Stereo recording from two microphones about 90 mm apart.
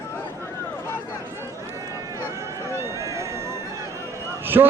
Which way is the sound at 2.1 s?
30° right (ahead or behind).